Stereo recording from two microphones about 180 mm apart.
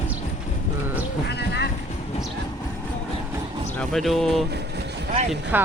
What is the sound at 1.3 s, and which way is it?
Clip-clop, 65° left (ahead or behind).